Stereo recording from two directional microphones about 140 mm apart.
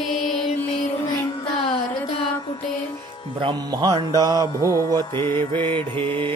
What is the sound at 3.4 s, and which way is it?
Mantra, 35° right (ahead or behind).